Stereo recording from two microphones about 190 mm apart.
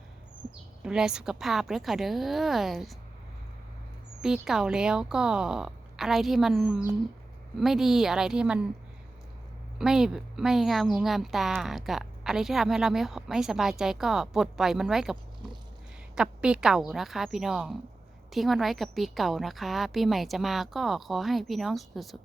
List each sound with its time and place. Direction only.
0.8 s a woman's voice: 5° right (ahead or behind)
4.2 s a woman's voice: 5° right (ahead or behind)
9.7 s a woman's voice: 5° right (ahead or behind)